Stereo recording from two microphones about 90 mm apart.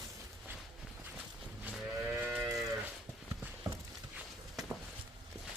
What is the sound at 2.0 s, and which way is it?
Moo, 15° right (ahead or behind).